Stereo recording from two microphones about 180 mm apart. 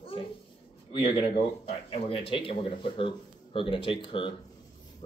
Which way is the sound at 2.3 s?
30° left (ahead or behind).